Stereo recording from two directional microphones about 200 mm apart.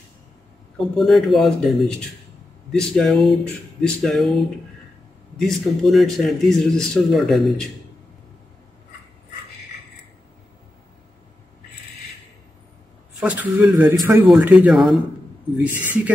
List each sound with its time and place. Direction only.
0.9 s speech: centre (ahead or behind)
5.4 s speech: centre (ahead or behind)
13.2 s speech: 10° right (ahead or behind)